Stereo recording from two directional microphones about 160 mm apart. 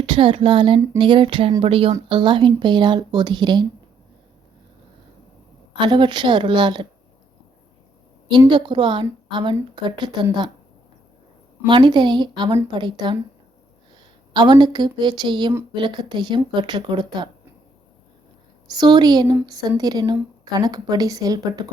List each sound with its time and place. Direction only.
0.0 s a woman's voice: 30° right (ahead or behind)
5.8 s a woman's voice: 30° right (ahead or behind)
8.4 s a woman's voice: 30° right (ahead or behind)
11.6 s a woman's voice: 30° right (ahead or behind)
14.3 s a woman's voice: 30° right (ahead or behind)
18.7 s a woman's voice: 25° right (ahead or behind)